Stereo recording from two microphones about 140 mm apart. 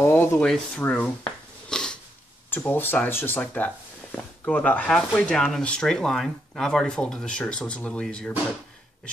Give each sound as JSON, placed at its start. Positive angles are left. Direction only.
{"t": 0.0, "sound": "speech", "side_deg": 15}
{"t": 0.5, "sound": "a sound", "side_deg": 10}
{"t": 2.5, "sound": "speech", "side_deg": 15}